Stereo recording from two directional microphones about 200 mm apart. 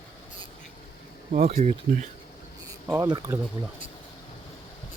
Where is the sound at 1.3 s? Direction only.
35° right (ahead or behind).